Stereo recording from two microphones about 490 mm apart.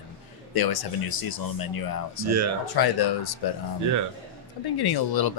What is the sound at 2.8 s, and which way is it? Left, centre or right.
Speech, left.